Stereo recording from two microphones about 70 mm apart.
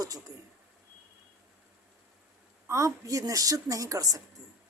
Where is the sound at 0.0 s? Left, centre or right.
Right.